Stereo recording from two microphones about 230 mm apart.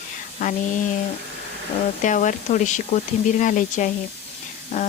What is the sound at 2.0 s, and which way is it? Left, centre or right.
Speech, left.